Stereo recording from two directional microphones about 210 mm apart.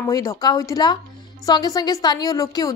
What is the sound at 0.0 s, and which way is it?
A woman's voice, 15° left (ahead or behind).